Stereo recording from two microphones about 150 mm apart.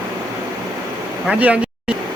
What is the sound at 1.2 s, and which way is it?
Speech, 10° right (ahead or behind).